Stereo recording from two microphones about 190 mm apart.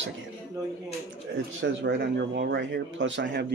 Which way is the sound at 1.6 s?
65° right (ahead or behind).